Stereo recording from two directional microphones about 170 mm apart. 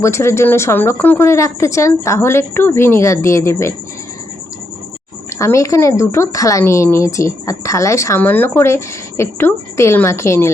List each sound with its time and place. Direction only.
0.0 s a woman's voice: 15° left (ahead or behind)
5.3 s a woman's voice: 15° left (ahead or behind)